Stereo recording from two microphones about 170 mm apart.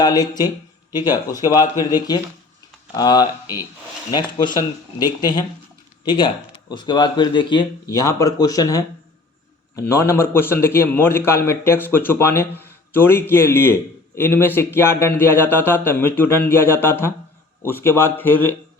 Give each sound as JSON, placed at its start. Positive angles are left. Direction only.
{"t": 0.0, "sound": "speech", "side_deg": 25}
{"t": 1.8, "sound": "a man's voice", "side_deg": 20}